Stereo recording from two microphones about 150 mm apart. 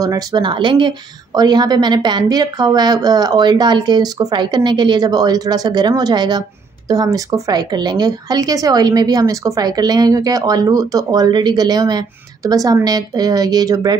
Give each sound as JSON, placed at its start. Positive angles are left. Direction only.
{"t": 0.0, "sound": "speech", "side_deg": -25}